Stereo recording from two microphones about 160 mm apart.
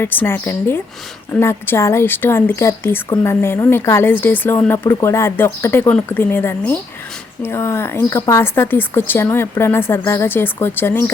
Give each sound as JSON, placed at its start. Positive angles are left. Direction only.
{"t": 0.0, "sound": "a woman's voice", "side_deg": 15}